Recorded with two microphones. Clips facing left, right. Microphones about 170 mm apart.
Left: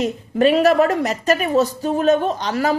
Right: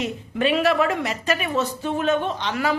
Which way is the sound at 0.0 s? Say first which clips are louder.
Left 7 dB; 40° left (ahead or behind).